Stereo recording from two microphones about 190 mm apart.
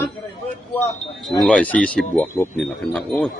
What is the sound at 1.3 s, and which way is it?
A man's voice, 5° left (ahead or behind).